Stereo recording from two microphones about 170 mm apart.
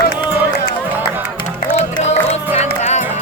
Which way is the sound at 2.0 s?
40° left (ahead or behind).